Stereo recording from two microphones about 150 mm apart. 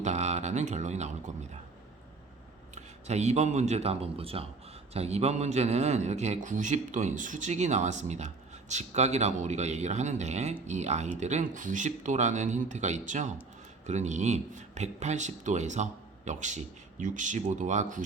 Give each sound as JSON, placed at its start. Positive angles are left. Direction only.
{"t": 0.0, "sound": "speech", "side_deg": -50}
{"t": 2.7, "sound": "a man's voice", "side_deg": -50}